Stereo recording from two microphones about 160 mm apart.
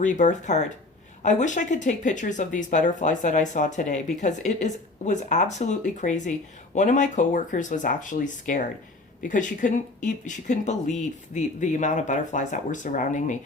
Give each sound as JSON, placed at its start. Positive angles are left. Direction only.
{"t": 0.0, "sound": "speech", "side_deg": 50}